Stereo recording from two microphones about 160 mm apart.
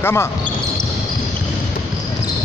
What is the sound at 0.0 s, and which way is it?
Speech, 15° left (ahead or behind).